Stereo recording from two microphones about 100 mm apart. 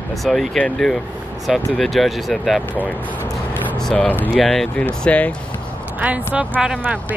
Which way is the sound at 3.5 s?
15° left (ahead or behind).